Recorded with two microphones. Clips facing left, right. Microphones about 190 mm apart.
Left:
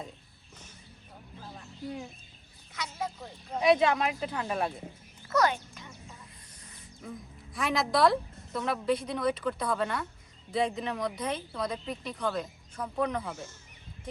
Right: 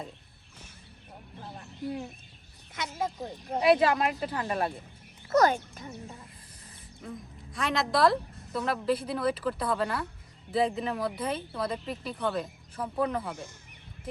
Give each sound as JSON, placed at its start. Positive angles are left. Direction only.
{"t": 3.2, "sound": "speech", "side_deg": -40}
{"t": 3.6, "sound": "speech", "side_deg": -5}
{"t": 5.3, "sound": "speech", "side_deg": -40}
{"t": 7.0, "sound": "speech", "side_deg": 0}